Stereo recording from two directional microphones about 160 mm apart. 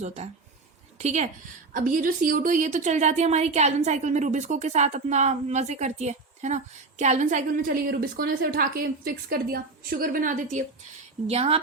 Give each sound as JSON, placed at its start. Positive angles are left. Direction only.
{"t": 0.9, "sound": "a woman's voice", "side_deg": -45}
{"t": 11.3, "sound": "a woman's voice", "side_deg": -40}